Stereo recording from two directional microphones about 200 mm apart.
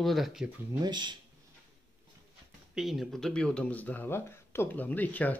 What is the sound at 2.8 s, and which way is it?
Speech, centre (ahead or behind).